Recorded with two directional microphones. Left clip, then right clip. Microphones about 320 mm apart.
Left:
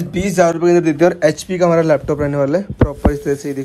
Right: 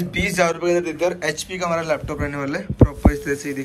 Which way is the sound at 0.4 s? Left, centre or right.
Left.